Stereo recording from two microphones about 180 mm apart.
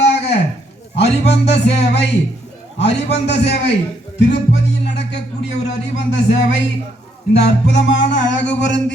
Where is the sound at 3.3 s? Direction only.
70° left (ahead or behind).